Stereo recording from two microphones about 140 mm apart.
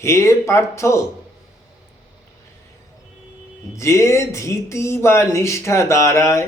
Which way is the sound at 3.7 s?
20° left (ahead or behind).